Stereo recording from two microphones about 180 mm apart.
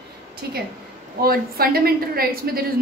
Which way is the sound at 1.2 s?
55° right (ahead or behind).